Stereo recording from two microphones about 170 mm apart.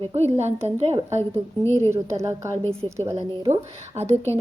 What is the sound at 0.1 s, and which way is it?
Speech, 40° right (ahead or behind).